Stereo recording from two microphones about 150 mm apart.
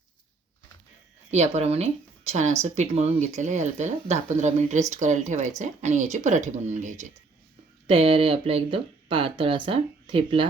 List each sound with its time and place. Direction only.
1.3 s speech: 50° right (ahead or behind)
7.9 s speech: 40° right (ahead or behind)